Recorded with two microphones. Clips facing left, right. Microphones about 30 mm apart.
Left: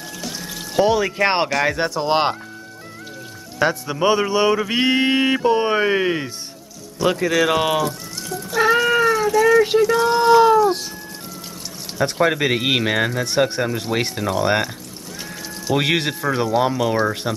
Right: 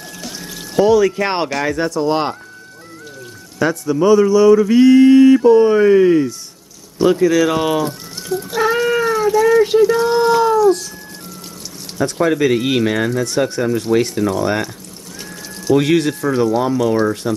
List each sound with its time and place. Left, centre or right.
0.7 s speech: left
3.5 s speech: left
7.1 s speech: centre
8.3 s cat: centre
8.5 s cat: centre
9.8 s speech: centre
10.5 s a sound: left
12.0 s speech: left
15.7 s speech: centre